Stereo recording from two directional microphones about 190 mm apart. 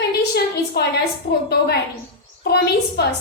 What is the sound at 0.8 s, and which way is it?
Speech, 60° left (ahead or behind).